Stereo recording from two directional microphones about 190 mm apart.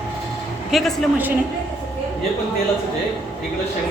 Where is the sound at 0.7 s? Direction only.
5° right (ahead or behind).